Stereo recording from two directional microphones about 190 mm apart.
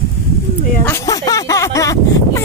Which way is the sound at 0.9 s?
15° left (ahead or behind).